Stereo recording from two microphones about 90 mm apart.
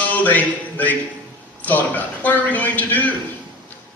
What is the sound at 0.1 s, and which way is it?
Speech, 20° left (ahead or behind).